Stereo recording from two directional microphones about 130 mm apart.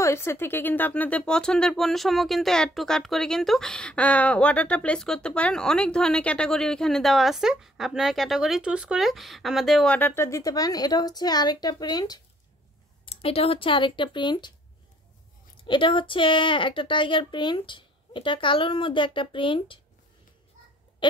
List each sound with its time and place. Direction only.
0.0 s speech: 20° left (ahead or behind); by 9.9 s centre (ahead or behind)
9.9 s speech: 15° left (ahead or behind)
13.0 s speech: 50° left (ahead or behind)
15.6 s speech: 40° left (ahead or behind)
21.0 s a sound: 40° left (ahead or behind)